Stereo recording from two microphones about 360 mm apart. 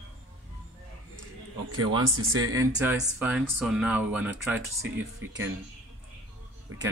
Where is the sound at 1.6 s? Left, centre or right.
Right.